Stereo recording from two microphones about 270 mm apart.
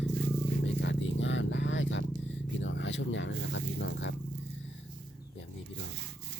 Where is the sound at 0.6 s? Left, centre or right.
Left.